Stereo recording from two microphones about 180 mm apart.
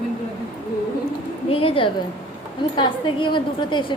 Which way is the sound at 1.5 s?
30° left (ahead or behind).